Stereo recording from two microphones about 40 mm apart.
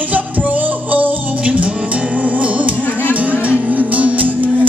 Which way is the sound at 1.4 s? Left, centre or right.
Right.